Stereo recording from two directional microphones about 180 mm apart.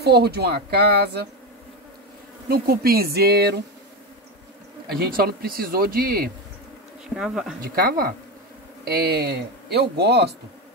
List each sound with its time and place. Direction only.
0.0 s speech: 65° right (ahead or behind)
2.5 s speech: 55° right (ahead or behind)
4.8 s speech: 60° right (ahead or behind)
7.2 s speech: 5° right (ahead or behind)
7.6 s speech: 55° right (ahead or behind)